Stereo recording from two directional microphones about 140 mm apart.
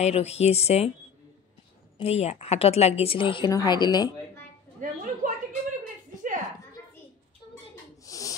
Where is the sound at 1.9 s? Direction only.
50° left (ahead or behind); by 4.1 s 30° left (ahead or behind).